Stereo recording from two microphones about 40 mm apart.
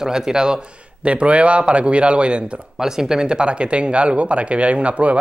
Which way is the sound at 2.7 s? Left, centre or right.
Centre.